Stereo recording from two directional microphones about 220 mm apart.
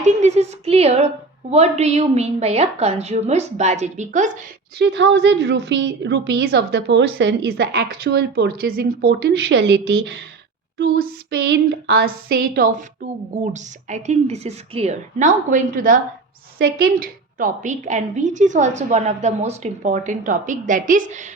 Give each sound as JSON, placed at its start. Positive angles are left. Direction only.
{"t": 0.0, "sound": "a woman's voice", "side_deg": -30}
{"t": 4.8, "sound": "a woman's voice", "side_deg": -55}